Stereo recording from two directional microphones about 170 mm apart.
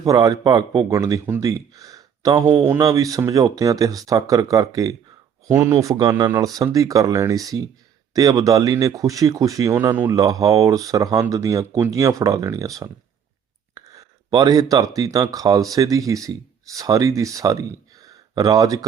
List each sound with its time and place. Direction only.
0.0 s speech: 20° right (ahead or behind)